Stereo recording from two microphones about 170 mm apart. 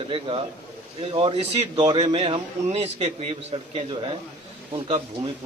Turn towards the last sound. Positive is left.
turn(degrees=-30)  # may be behind; listen again after turning